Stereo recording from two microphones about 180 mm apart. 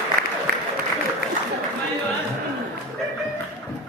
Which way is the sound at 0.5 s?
55° right (ahead or behind).